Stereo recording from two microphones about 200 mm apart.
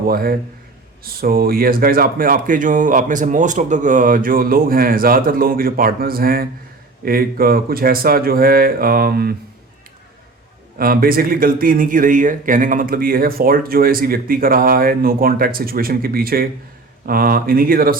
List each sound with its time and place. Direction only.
0.1 s speech: 50° right (ahead or behind)
10.8 s speech: 45° right (ahead or behind)